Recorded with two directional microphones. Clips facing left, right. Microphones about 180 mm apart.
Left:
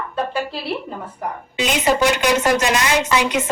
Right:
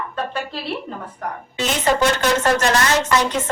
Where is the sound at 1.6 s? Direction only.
15° left (ahead or behind).